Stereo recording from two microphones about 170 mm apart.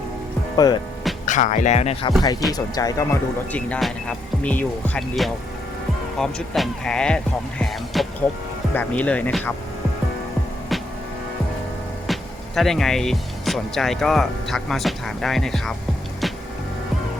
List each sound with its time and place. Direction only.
0.5 s speech: 25° left (ahead or behind)
1.2 s speech: 45° left (ahead or behind); by 3.2 s 20° left (ahead or behind)
3.5 s speech: 5° left (ahead or behind)
12.0 s speech: centre (ahead or behind)